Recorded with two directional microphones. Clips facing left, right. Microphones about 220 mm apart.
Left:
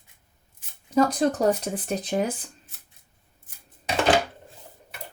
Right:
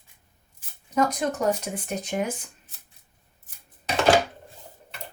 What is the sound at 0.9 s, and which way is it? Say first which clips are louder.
A woman's voice: left 3 dB; 35° left (ahead or behind).